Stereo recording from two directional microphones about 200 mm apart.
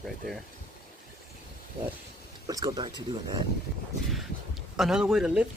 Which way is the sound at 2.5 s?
20° right (ahead or behind).